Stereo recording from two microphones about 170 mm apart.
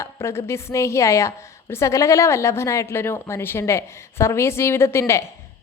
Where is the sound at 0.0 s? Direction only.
15° left (ahead or behind).